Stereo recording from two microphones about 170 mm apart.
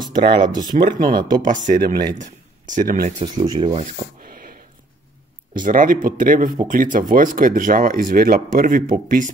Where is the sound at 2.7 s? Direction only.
50° right (ahead or behind).